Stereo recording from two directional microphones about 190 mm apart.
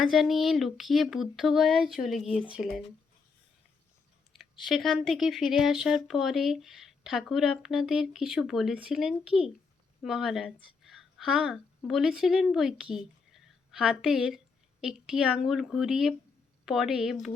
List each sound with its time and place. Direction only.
0.0 s speech: centre (ahead or behind)
2.2 s speech: 30° left (ahead or behind)
2.5 s speech: centre (ahead or behind)
4.3 s a woman's voice: centre (ahead or behind)